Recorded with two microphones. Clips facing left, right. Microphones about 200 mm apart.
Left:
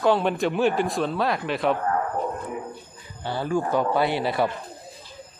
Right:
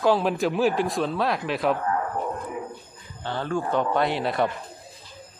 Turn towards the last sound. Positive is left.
turn(degrees=0)  # may be behind; listen again after turning